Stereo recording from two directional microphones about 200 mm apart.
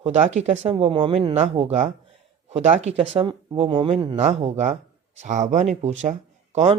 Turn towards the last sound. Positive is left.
turn(degrees=-35)  # may be behind; listen again after turning